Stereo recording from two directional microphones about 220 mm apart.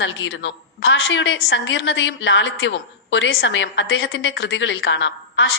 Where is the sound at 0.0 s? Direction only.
60° left (ahead or behind).